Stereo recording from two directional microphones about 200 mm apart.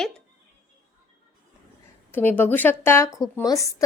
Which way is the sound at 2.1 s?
10° left (ahead or behind).